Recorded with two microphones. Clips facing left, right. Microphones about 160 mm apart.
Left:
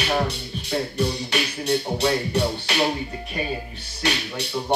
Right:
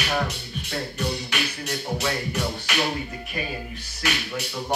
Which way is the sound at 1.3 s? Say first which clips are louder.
Left 6 dB; 35° left (ahead or behind).